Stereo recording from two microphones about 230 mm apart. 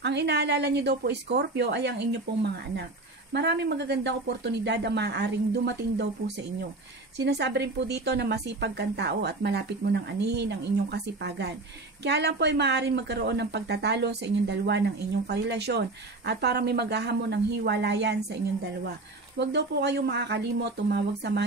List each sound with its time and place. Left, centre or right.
0.0 s speech: right
3.3 s speech: right